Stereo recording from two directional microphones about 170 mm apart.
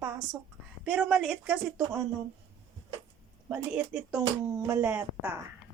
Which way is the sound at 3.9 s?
5° right (ahead or behind).